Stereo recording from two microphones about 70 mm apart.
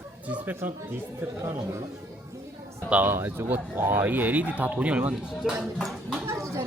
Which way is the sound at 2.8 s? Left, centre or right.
Right.